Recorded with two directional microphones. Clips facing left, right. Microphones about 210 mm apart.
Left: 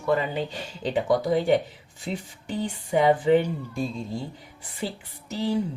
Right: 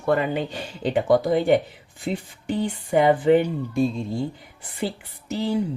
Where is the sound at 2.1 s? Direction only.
65° right (ahead or behind).